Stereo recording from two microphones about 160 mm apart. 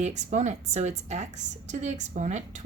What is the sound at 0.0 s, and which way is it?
A woman's voice, 45° right (ahead or behind).